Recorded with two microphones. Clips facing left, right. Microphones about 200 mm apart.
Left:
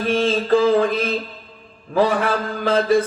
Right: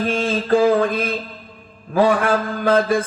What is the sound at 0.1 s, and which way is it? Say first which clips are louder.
Mantra: left 3 dB; 50° right (ahead or behind).